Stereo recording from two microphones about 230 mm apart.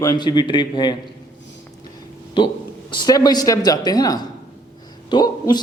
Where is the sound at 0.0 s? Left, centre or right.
Centre.